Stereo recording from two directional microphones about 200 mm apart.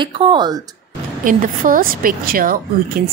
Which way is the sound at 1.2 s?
40° right (ahead or behind).